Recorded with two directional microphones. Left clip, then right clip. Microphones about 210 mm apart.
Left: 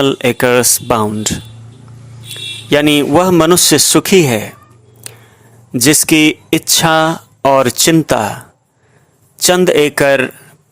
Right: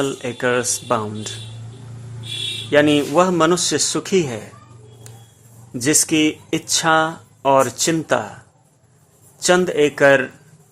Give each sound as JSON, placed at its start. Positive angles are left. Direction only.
{"t": 0.0, "sound": "speech", "side_deg": 35}
{"t": 2.6, "sound": "speech", "side_deg": 40}
{"t": 5.1, "sound": "a sound", "side_deg": 40}
{"t": 5.7, "sound": "speech", "side_deg": 40}